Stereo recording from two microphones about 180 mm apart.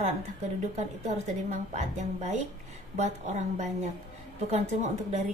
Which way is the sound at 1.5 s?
40° right (ahead or behind).